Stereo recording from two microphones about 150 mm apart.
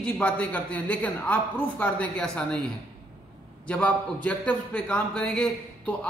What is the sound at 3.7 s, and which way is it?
A man's voice, 10° left (ahead or behind).